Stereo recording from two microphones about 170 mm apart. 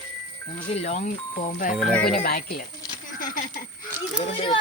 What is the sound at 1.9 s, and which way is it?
Speech, 5° left (ahead or behind).